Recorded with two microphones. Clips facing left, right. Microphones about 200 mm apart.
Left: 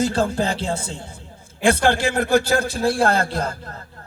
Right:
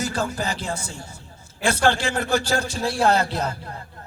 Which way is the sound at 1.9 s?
55° left (ahead or behind).